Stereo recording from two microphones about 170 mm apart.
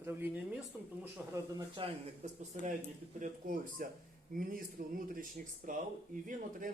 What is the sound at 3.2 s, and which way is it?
Speech, 55° right (ahead or behind).